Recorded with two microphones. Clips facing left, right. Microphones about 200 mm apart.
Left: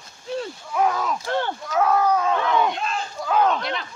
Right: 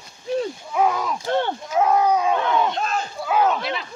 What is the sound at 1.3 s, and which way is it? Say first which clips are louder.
Speech: right 3 dB; 20° right (ahead or behind).